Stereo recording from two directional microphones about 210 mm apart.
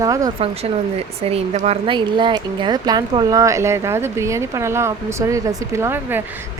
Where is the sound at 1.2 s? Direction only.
30° right (ahead or behind).